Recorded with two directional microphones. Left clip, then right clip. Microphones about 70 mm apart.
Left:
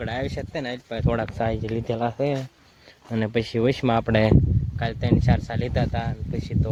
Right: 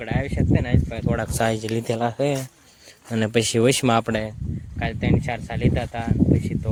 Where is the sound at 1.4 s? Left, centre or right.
Right.